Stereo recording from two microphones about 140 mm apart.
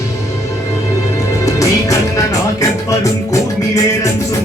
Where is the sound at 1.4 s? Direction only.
25° left (ahead or behind).